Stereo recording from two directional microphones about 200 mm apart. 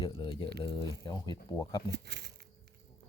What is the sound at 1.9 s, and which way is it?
Speech, 55° right (ahead or behind).